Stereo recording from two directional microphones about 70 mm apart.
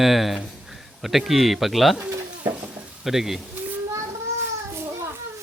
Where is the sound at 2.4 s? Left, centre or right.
Right.